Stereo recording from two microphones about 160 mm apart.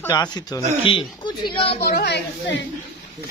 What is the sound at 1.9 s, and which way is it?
Speech, 90° left.